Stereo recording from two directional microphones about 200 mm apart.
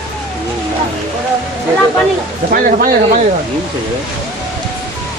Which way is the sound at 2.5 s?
45° right (ahead or behind).